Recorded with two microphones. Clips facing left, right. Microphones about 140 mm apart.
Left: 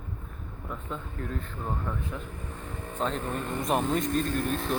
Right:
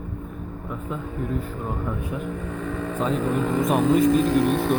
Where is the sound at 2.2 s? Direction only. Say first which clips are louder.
Right 11 dB; 70° right (ahead or behind).